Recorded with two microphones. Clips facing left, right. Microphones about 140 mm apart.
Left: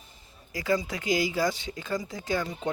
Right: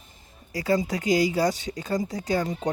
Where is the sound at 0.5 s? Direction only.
35° right (ahead or behind).